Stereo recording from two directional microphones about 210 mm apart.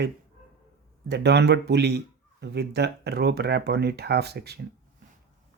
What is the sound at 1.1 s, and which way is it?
Speech, 50° right (ahead or behind).